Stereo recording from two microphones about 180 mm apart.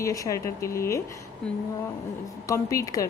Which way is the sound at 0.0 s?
20° left (ahead or behind).